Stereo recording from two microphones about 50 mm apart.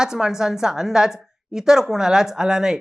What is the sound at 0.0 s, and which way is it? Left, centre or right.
A woman's voice, centre.